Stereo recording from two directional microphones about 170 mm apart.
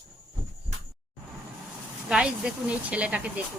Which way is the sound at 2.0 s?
5° right (ahead or behind).